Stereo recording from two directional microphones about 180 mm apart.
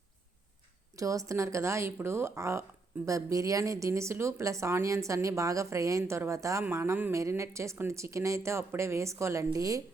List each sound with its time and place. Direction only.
0.9 s speech: 20° right (ahead or behind)